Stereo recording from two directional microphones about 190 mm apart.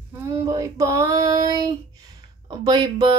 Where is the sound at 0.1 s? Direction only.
15° right (ahead or behind).